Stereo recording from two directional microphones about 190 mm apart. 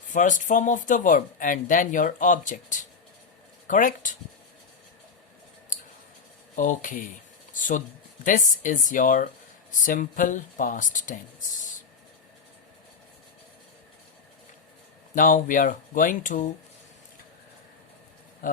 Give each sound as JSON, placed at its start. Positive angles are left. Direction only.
{"t": 0.1, "sound": "speech", "side_deg": 40}
{"t": 6.6, "sound": "speech", "side_deg": 45}
{"t": 7.5, "sound": "a sound", "side_deg": 45}
{"t": 8.2, "sound": "speech", "side_deg": 45}
{"t": 15.1, "sound": "speech", "side_deg": 45}